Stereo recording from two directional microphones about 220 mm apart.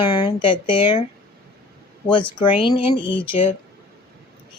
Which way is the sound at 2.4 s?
25° left (ahead or behind).